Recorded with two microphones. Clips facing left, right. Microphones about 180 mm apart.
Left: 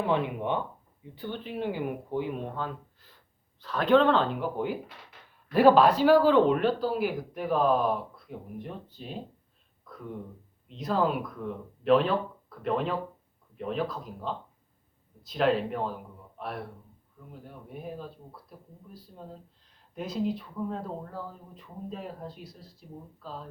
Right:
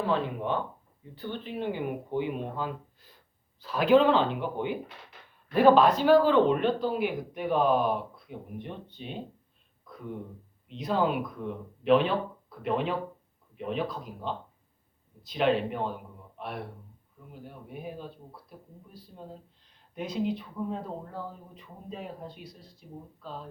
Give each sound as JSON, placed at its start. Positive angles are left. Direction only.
{"t": 0.0, "sound": "speech", "side_deg": 15}
{"t": 10.8, "sound": "speech", "side_deg": 0}
{"t": 20.0, "sound": "speech", "side_deg": 0}